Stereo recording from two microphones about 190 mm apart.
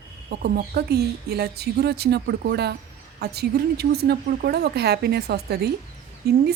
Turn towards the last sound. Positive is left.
turn(degrees=-60)  # may be behind; listen again after turning